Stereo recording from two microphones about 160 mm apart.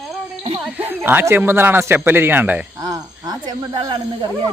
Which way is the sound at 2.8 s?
25° right (ahead or behind).